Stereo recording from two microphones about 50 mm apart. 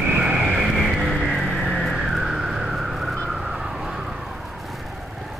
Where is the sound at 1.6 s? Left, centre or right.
Centre.